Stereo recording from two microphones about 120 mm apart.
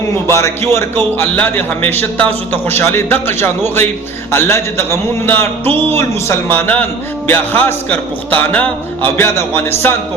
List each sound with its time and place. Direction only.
0.3 s a man's voice: 25° left (ahead or behind)